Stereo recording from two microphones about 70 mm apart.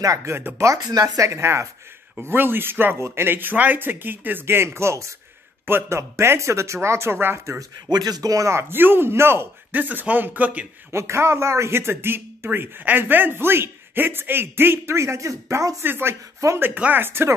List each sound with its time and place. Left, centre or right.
0.0 s a woman's voice: right
0.7 s a woman's voice: right
2.2 s speech: right
7.9 s speech: right
10.9 s speech: right
15.8 s speech: right
16.5 s speech: right